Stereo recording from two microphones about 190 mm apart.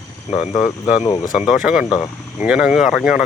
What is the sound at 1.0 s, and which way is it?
Speech, 25° left (ahead or behind).